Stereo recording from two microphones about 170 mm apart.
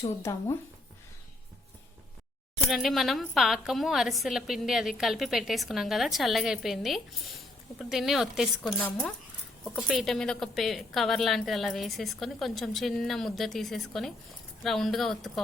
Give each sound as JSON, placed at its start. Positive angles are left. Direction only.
{"t": 0.0, "sound": "speech", "side_deg": 15}
{"t": 2.6, "sound": "a woman's voice", "side_deg": 0}